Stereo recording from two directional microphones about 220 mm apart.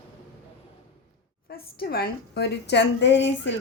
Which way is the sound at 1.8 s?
45° left (ahead or behind).